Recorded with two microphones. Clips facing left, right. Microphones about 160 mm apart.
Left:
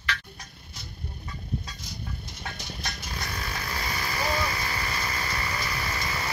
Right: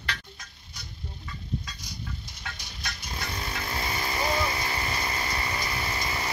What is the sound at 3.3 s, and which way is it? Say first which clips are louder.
Vehicle: right 2 dB; 25° right (ahead or behind).